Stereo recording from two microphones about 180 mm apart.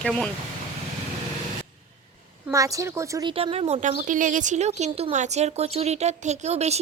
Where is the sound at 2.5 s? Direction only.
20° right (ahead or behind).